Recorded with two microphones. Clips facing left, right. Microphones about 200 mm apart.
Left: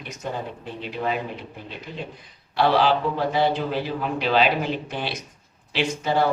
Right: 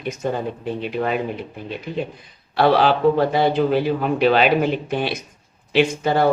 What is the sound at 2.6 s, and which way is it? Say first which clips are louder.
Speech: right 4 dB; 55° right (ahead or behind).